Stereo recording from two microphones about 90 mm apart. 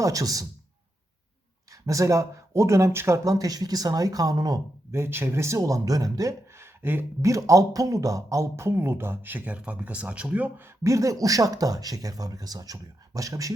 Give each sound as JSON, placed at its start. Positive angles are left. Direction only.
{"t": 0.0, "sound": "speech", "side_deg": -40}
{"t": 1.7, "sound": "speech", "side_deg": -40}
{"t": 4.9, "sound": "speech", "side_deg": -30}
{"t": 7.2, "sound": "speech", "side_deg": -35}
{"t": 10.8, "sound": "speech", "side_deg": -40}